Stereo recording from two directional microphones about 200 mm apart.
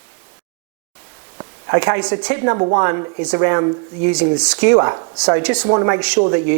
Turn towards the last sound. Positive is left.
turn(degrees=-20)  # may be behind; listen again after turning